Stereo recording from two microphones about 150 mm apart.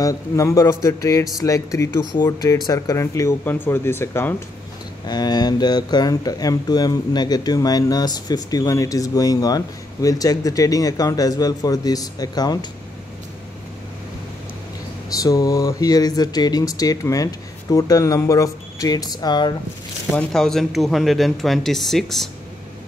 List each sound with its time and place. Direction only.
0.0 s speech: 20° left (ahead or behind)
5.0 s speech: 25° left (ahead or behind)
15.2 s speech: 25° left (ahead or behind)
20.1 s speech: 5° left (ahead or behind)